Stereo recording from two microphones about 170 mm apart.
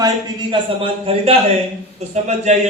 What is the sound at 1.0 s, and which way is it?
A man's voice, 35° right (ahead or behind).